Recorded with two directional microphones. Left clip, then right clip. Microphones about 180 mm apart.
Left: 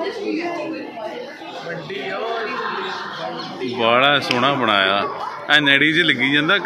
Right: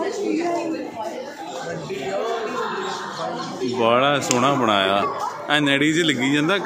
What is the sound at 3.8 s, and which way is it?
A man's voice, 10° right (ahead or behind).